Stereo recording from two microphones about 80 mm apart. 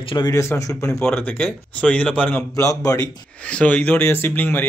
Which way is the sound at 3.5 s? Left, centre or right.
Centre.